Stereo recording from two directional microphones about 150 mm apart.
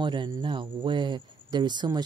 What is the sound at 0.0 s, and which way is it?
Speech, 30° right (ahead or behind).